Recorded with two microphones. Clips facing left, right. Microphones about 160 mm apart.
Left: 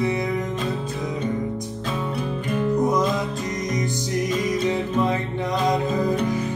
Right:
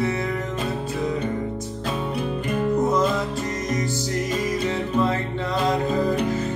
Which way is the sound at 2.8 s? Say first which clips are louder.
Even; 15° left (ahead or behind).